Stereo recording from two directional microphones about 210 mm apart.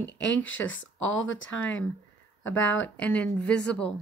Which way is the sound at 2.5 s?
65° left (ahead or behind).